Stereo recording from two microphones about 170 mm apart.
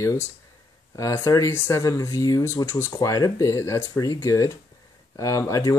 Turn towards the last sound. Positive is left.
turn(degrees=20)  # may be behind; listen again after turning